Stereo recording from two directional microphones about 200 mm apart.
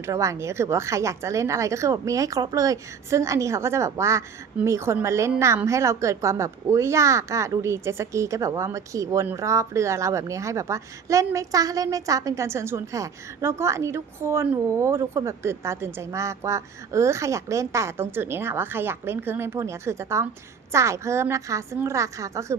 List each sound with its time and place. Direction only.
0.0 s a woman's voice: 15° right (ahead or behind)